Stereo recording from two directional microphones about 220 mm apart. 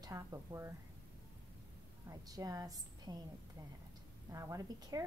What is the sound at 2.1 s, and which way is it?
A woman's voice, 15° right (ahead or behind).